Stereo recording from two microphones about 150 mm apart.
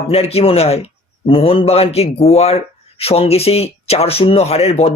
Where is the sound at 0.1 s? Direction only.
40° left (ahead or behind).